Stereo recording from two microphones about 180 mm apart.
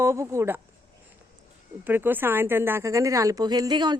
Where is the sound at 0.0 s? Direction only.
15° right (ahead or behind).